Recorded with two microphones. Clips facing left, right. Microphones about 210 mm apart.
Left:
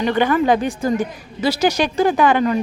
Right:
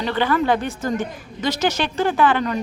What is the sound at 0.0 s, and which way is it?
A woman's voice, 15° left (ahead or behind).